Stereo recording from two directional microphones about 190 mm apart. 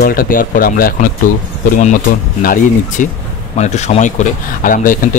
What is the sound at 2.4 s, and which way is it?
Speech, 45° left (ahead or behind).